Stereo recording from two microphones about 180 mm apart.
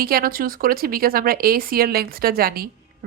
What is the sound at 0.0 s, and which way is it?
A woman's voice, 55° right (ahead or behind).